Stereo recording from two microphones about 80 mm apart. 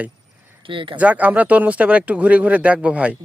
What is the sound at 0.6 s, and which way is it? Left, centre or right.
Speech, right.